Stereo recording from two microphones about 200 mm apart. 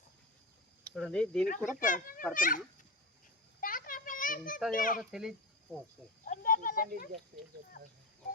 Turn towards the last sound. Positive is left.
turn(degrees=45)  # may be behind; listen again after turning